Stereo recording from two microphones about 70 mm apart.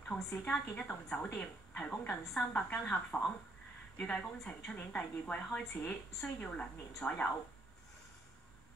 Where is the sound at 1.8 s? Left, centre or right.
Left.